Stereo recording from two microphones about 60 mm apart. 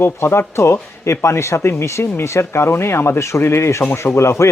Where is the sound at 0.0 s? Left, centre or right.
Left.